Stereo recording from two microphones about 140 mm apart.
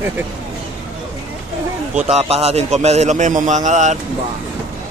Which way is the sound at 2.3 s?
50° right (ahead or behind).